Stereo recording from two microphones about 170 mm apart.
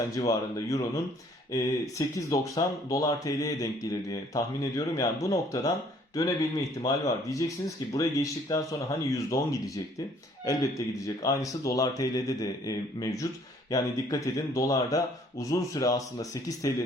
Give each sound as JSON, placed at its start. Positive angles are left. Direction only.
{"t": 0.2, "sound": "speech", "side_deg": 20}